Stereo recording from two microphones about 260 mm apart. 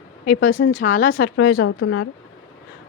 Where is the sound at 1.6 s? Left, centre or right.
Left.